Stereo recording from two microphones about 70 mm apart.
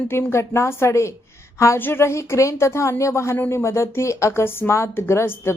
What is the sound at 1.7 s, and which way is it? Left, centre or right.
A woman's voice, left.